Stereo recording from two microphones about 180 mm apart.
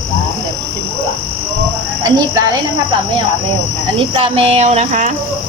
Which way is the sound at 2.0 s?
20° right (ahead or behind).